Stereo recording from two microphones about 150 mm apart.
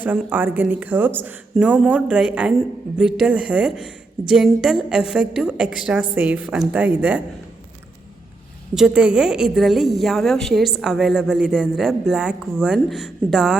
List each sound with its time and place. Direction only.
0.0 s a woman's voice: 10° right (ahead or behind)
8.7 s a woman's voice: 5° right (ahead or behind)